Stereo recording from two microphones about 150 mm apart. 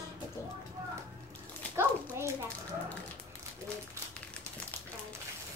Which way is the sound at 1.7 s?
15° right (ahead or behind).